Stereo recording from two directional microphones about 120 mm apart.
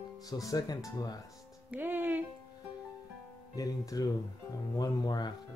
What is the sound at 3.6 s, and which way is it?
Speech, 30° left (ahead or behind).